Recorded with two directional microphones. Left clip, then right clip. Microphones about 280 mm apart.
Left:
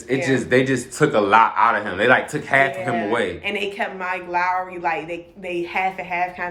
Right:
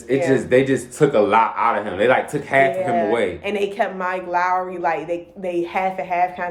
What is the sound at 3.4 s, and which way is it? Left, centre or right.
A woman's voice, centre.